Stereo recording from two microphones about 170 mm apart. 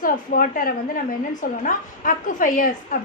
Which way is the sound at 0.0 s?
55° left (ahead or behind).